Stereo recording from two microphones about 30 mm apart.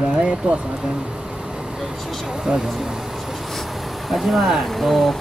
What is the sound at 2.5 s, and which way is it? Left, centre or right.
Speech, right.